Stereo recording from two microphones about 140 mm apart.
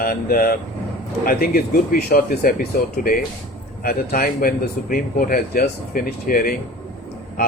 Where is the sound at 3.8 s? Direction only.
90° left.